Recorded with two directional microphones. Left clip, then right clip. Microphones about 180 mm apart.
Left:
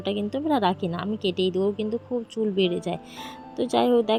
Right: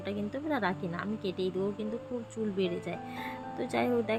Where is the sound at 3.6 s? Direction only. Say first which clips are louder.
Left 9 dB; 25° left (ahead or behind).